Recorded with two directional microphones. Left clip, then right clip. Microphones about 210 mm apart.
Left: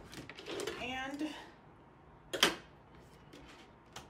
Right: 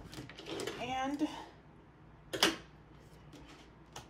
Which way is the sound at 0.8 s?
25° right (ahead or behind).